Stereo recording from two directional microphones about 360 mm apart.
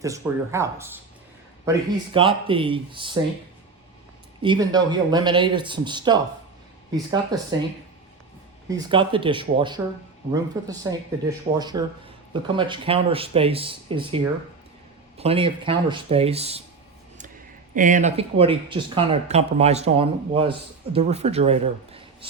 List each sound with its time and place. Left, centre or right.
0.0 s speech: centre
4.4 s speech: centre
8.7 s speech: centre
15.2 s speech: centre
17.7 s speech: right